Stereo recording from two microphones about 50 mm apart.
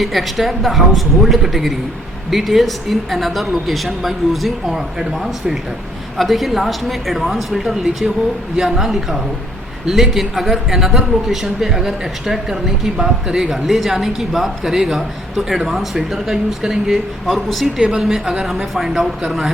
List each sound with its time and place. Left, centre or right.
0.0 s a man's voice: centre